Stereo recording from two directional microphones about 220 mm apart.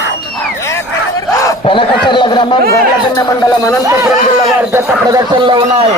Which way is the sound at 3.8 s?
15° right (ahead or behind).